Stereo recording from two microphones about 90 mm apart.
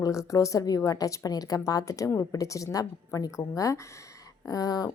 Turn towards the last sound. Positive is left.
turn(degrees=45)  # may be behind; listen again after turning